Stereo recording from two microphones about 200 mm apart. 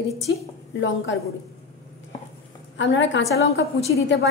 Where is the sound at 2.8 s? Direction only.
65° left (ahead or behind).